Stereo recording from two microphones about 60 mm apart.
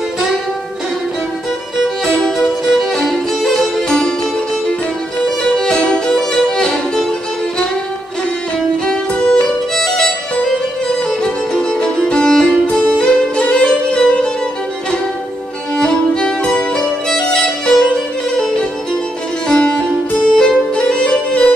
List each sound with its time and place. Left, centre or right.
2.8 s music: centre
5.2 s music: centre
8.8 s music: centre
15.7 s music: centre